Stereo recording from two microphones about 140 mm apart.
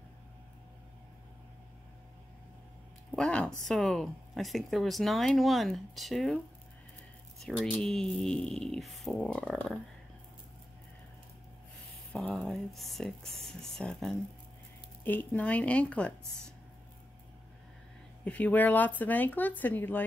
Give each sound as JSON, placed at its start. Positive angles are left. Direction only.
{"t": 3.2, "sound": "speech", "side_deg": 5}
{"t": 7.4, "sound": "speech", "side_deg": 5}
{"t": 12.1, "sound": "speech", "side_deg": 5}
{"t": 18.2, "sound": "speech", "side_deg": 10}